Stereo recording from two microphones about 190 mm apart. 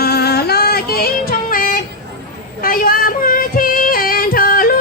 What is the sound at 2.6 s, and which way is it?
Female singing, 50° left (ahead or behind).